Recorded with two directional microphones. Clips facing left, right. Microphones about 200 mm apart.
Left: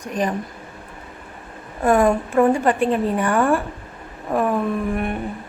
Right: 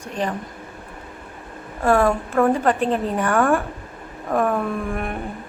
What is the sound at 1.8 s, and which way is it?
A woman's voice, 15° left (ahead or behind).